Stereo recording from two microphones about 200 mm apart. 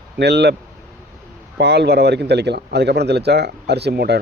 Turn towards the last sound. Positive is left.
turn(degrees=-55)  # may be behind; listen again after turning